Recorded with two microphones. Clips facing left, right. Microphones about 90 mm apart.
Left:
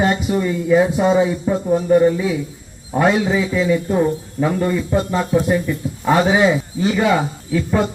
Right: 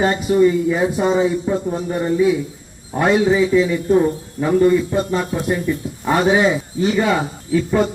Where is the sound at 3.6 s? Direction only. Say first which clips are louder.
Right 2 dB; 10° left (ahead or behind).